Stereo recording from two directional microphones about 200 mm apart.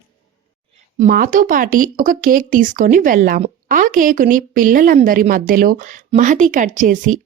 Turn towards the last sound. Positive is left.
turn(degrees=-40)  # may be behind; listen again after turning